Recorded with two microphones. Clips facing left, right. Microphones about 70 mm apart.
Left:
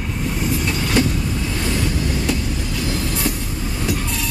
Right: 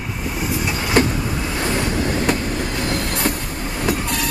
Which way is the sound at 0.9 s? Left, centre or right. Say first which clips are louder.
Right 3 dB; right.